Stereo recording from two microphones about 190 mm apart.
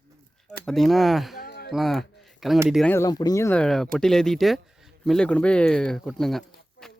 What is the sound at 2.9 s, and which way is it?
Speech, 15° left (ahead or behind).